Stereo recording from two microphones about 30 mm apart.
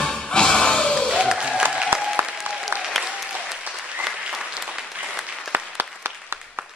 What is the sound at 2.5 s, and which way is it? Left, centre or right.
Applause, centre.